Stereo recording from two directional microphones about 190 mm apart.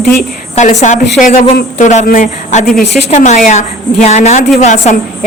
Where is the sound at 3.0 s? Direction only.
35° left (ahead or behind).